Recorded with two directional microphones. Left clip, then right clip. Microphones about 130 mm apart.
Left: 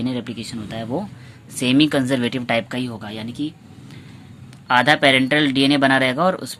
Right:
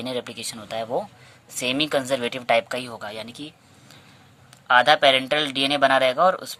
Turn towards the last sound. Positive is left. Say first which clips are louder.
# even
turn(degrees=-20)  # may be behind; listen again after turning